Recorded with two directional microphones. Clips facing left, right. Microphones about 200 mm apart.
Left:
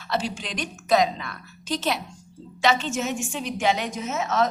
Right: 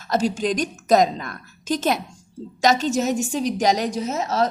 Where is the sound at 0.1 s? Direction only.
45° right (ahead or behind).